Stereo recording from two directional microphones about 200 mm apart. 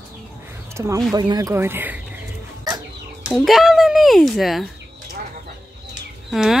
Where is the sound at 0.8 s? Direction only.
15° right (ahead or behind).